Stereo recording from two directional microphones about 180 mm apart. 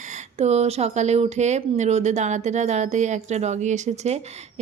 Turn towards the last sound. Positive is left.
turn(degrees=-40)  # may be behind; listen again after turning